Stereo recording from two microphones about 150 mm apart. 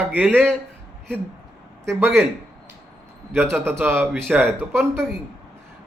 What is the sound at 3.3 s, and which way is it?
Speech, 15° right (ahead or behind).